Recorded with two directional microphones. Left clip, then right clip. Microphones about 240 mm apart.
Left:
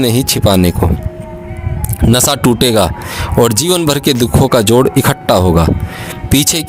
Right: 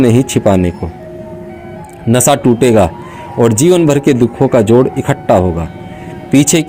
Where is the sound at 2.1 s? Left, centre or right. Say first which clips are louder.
Right 2 dB; left.